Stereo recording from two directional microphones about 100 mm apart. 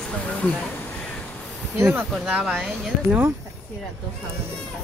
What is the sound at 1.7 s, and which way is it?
Speech, 25° right (ahead or behind).